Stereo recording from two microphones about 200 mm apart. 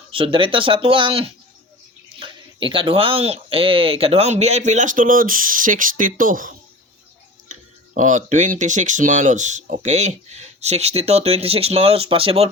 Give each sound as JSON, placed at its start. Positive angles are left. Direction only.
{"t": 0.1, "sound": "speech", "side_deg": -25}